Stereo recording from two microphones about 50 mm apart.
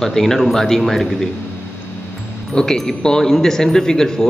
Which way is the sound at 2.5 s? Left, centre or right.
Centre.